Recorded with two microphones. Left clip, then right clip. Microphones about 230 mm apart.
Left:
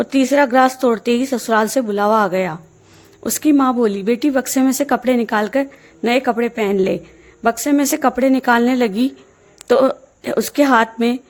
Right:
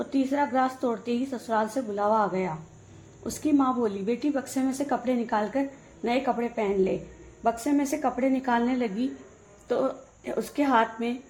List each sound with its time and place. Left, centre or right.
0.0 s a woman's voice: left